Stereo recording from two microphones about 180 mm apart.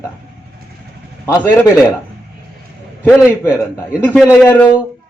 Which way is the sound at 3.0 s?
15° left (ahead or behind).